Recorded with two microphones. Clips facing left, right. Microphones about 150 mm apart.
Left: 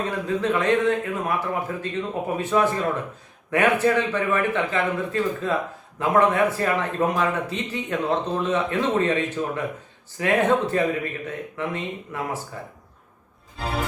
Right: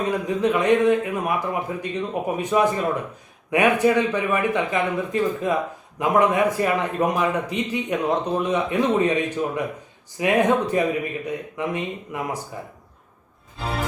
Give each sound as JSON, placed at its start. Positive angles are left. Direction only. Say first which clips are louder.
{"t": 0.0, "sound": "a man's voice", "louder": "right 3 dB", "side_deg": -15}
{"t": 13.6, "sound": "music", "louder": "even", "side_deg": 0}